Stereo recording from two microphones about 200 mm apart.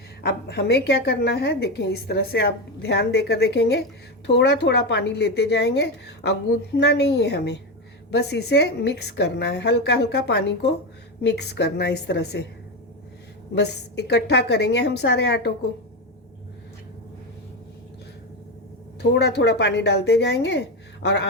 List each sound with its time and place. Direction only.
0.2 s a woman's voice: 55° left (ahead or behind)
13.6 s a woman's voice: 55° left (ahead or behind)
19.1 s a woman's voice: 60° left (ahead or behind)